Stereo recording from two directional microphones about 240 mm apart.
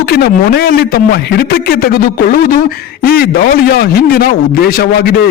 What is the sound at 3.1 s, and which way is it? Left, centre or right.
A man's voice, left.